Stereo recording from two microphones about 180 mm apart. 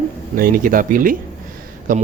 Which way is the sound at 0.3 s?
50° right (ahead or behind).